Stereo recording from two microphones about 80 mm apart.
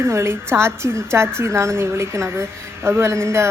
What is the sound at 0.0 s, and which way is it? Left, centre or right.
A woman's voice, right.